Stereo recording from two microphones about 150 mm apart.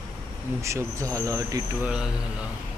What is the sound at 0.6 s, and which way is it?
Speech, 20° right (ahead or behind).